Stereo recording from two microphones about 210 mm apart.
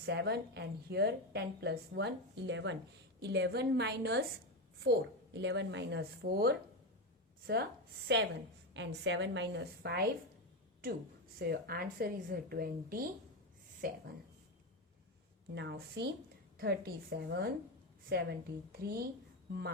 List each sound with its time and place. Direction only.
0.0 s a woman's voice: 55° right (ahead or behind)
5.3 s a woman's voice: 55° right (ahead or behind)
11.3 s a woman's voice: 50° right (ahead or behind)
15.5 s a woman's voice: 55° right (ahead or behind)